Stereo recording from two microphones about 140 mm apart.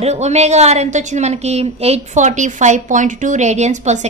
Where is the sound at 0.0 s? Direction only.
50° right (ahead or behind).